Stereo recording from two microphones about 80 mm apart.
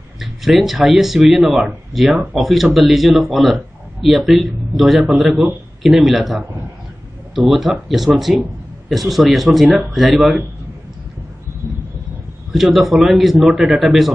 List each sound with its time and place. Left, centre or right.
0.2 s a man's voice: centre
6.4 s a man's voice: right
7.3 s a man's voice: centre
12.5 s a man's voice: centre